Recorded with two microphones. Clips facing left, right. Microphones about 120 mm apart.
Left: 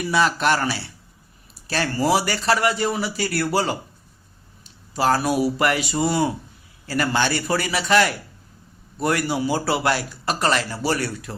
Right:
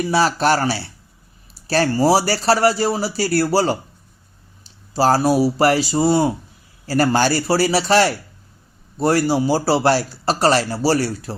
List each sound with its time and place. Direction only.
0.0 s speech: 35° right (ahead or behind)